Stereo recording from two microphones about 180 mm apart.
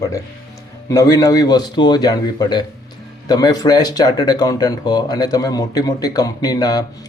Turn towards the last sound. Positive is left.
turn(degrees=20)  # may be behind; listen again after turning